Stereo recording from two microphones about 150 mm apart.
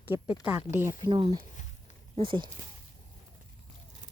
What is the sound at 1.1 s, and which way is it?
Speech, 35° right (ahead or behind).